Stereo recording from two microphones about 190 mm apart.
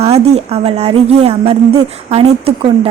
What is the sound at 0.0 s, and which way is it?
Speech, 35° right (ahead or behind).